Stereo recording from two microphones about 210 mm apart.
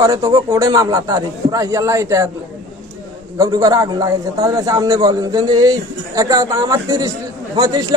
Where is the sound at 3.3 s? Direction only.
15° right (ahead or behind).